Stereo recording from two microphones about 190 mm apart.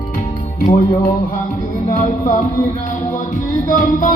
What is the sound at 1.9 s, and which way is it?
Music, 45° left (ahead or behind).